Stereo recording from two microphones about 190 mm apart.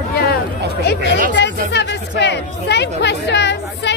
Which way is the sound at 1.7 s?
65° left (ahead or behind).